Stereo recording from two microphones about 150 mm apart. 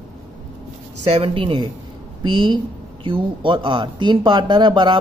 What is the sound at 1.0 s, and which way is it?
Speech, 40° right (ahead or behind).